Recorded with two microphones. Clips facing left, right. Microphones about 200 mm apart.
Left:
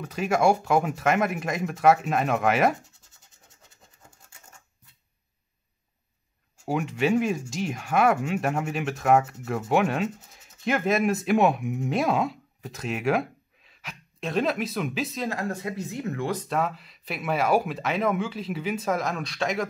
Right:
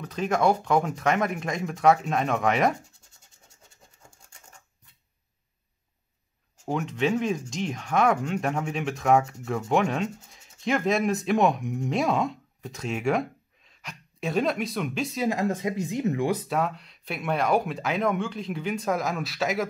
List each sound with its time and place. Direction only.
0.0 s speech: 10° left (ahead or behind)
6.6 s speech: 10° left (ahead or behind)
15.2 s speech: 20° right (ahead or behind); by 19.7 s centre (ahead or behind)